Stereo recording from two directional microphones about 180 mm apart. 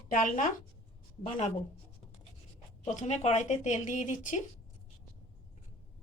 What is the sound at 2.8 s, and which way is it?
Speech, 40° left (ahead or behind).